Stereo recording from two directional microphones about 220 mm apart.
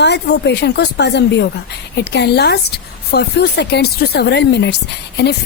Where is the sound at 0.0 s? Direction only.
50° left (ahead or behind).